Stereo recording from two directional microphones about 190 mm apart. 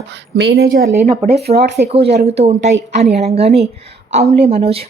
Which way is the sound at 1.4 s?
55° right (ahead or behind).